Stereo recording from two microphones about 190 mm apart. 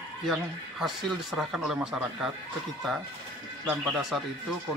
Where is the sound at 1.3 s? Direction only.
5° right (ahead or behind).